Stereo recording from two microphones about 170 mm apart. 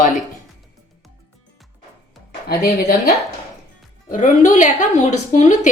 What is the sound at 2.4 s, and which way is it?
Speech, 65° left (ahead or behind).